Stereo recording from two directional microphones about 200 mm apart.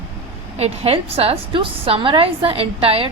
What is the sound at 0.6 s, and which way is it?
A woman's voice, 30° right (ahead or behind).